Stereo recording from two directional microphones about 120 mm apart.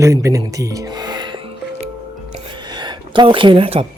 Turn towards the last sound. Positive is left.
turn(degrees=-50)  # may be behind; listen again after turning